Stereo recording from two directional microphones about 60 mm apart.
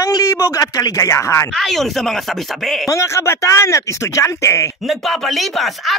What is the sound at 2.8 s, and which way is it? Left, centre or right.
Speech, left.